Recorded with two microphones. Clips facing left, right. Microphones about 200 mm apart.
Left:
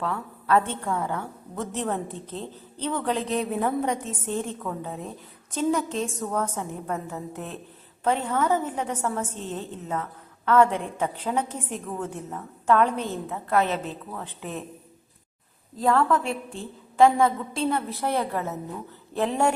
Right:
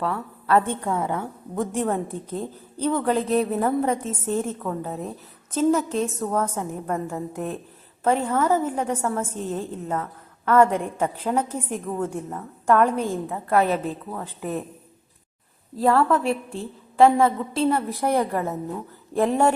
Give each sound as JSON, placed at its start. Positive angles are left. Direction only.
{"t": 0.0, "sound": "a woman's voice", "side_deg": 0}
{"t": 0.7, "sound": "a woman's voice", "side_deg": -20}
{"t": 15.8, "sound": "a woman's voice", "side_deg": -5}
{"t": 18.0, "sound": "a woman's voice", "side_deg": -15}